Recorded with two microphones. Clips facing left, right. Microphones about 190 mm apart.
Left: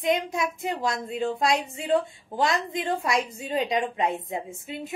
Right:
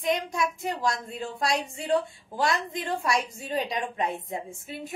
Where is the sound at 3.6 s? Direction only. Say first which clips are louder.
Left 4 dB; 20° left (ahead or behind).